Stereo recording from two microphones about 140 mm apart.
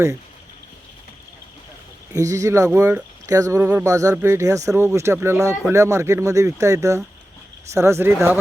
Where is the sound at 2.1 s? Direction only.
25° right (ahead or behind).